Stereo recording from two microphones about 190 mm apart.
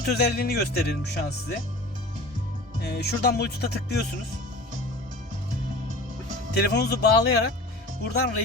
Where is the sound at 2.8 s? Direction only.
60° left (ahead or behind).